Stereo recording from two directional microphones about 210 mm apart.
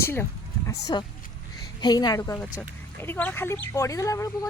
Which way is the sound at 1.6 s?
20° left (ahead or behind).